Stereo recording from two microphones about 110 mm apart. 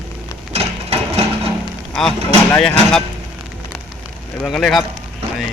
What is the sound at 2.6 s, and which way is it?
Speech, 5° left (ahead or behind).